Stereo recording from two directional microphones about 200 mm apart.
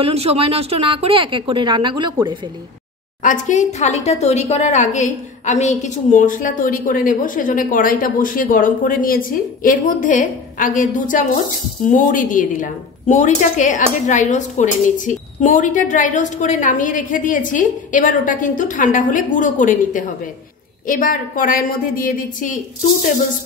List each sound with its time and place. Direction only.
0.0 s a woman's voice: 30° right (ahead or behind)
3.2 s a woman's voice: 40° left (ahead or behind)